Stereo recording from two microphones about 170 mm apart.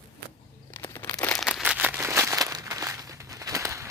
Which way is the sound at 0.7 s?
15° left (ahead or behind).